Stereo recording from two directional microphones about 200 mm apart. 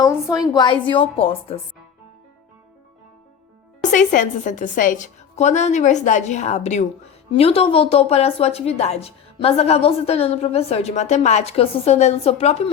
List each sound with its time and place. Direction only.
0.0 s a woman's voice: 20° left (ahead or behind)
3.9 s a woman's voice: 40° left (ahead or behind)